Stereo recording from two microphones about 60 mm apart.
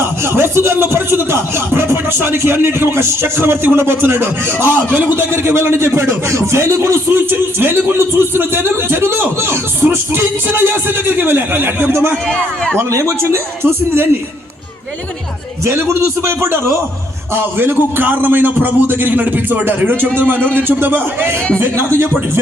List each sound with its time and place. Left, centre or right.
0.0 s speech: right
7.2 s speech: right
12.7 s a man's voice: right
15.6 s a man's voice: right